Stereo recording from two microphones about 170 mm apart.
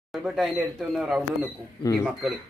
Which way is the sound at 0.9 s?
Centre (ahead or behind).